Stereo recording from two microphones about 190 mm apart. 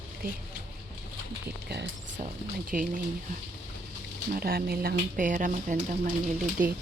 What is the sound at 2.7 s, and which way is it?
Speech, 45° right (ahead or behind).